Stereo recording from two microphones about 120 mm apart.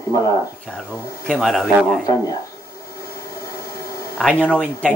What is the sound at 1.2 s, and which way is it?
Speech, centre (ahead or behind).